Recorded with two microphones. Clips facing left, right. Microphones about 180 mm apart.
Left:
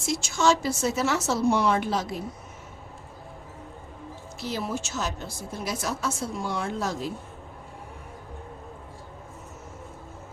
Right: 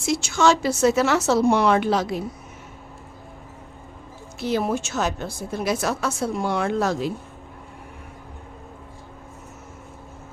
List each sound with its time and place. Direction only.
0.0 s a woman's voice: 70° right (ahead or behind)
4.4 s a woman's voice: 60° right (ahead or behind)